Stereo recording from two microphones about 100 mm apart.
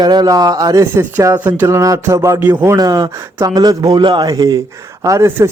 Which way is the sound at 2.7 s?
35° right (ahead or behind).